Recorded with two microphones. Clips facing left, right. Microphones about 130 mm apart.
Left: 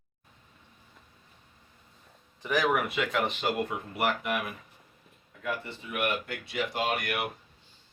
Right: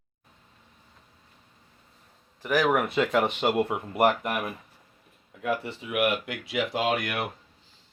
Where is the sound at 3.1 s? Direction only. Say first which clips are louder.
Right 5 dB; 60° right (ahead or behind).